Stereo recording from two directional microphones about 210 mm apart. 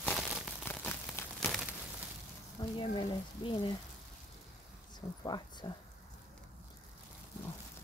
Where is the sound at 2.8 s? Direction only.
25° left (ahead or behind).